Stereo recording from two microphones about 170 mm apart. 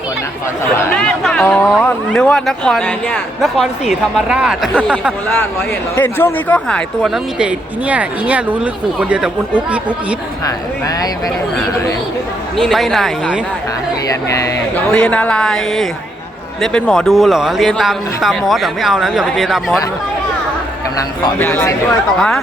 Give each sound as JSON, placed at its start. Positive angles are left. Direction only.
{"t": 0.9, "sound": "speech", "side_deg": 5}
{"t": 6.0, "sound": "speech", "side_deg": 10}
{"t": 10.4, "sound": "speech", "side_deg": 20}
{"t": 12.5, "sound": "speech", "side_deg": 0}
{"t": 14.1, "sound": "speech", "side_deg": 20}
{"t": 14.9, "sound": "speech", "side_deg": 5}
{"t": 21.3, "sound": "speech", "side_deg": 10}